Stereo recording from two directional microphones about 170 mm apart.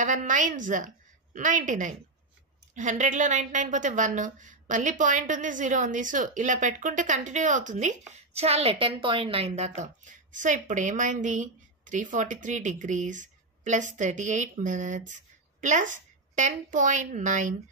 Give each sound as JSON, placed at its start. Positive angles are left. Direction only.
{"t": 0.0, "sound": "a woman's voice", "side_deg": -50}
{"t": 9.8, "sound": "a woman's voice", "side_deg": -50}